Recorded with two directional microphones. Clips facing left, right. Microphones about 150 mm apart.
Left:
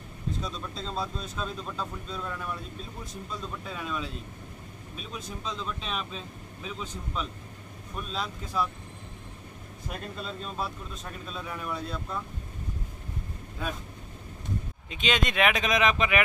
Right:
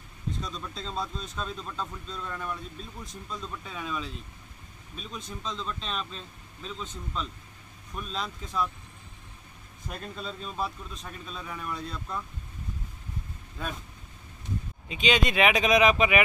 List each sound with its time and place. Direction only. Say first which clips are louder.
0.4 s speech: left 1 dB; centre (ahead or behind)
9.8 s speech: left 1 dB; centre (ahead or behind)
13.6 s speech: left 2 dB; centre (ahead or behind)
14.9 s speech: right 3 dB; centre (ahead or behind)